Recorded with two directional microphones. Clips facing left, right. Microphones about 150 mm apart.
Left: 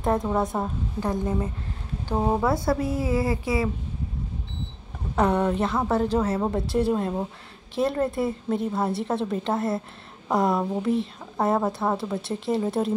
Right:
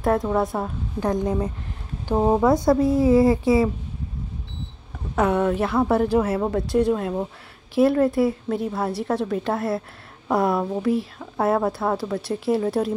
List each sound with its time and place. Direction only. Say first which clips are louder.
0.0 s a woman's voice: right 3 dB; centre (ahead or behind)
1.0 s speech: right 4 dB; 15° right (ahead or behind)
5.1 s speech: right 2 dB; 5° right (ahead or behind)
6.7 s a woman's voice: right 4 dB; 5° left (ahead or behind)